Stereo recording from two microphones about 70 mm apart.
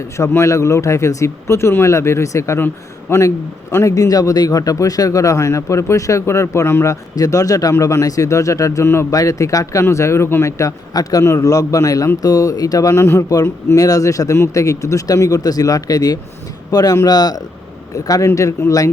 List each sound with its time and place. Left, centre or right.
0.0 s a man's voice: left
7.7 s a man's voice: left
8.9 s speech: left
9.1 s a man's voice: left
10.6 s a man's voice: left
12.9 s a man's voice: left
13.8 s speech: left
17.9 s a man's voice: left